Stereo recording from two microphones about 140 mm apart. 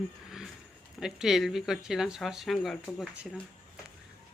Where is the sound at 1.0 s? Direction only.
5° right (ahead or behind).